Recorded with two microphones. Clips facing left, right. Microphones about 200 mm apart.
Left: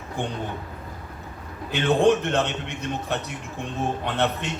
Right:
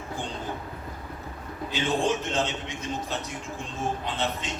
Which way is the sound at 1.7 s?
60° left (ahead or behind).